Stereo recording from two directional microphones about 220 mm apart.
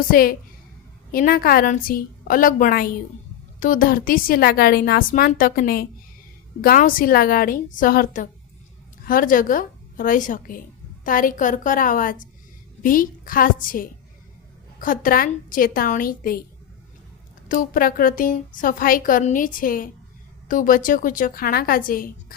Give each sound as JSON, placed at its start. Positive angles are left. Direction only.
{"t": 0.0, "sound": "a woman's voice", "side_deg": 40}
{"t": 17.5, "sound": "a woman's voice", "side_deg": 40}